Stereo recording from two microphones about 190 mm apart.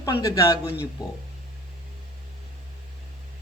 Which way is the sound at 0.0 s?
20° left (ahead or behind).